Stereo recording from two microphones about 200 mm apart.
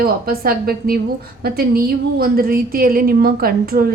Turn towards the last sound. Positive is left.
turn(degrees=-50)  # may be behind; listen again after turning